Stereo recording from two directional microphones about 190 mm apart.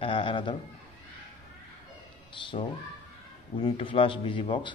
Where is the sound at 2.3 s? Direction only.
25° left (ahead or behind).